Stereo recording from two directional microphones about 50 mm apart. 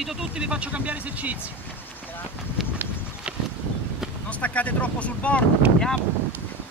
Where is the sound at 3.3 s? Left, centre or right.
Right.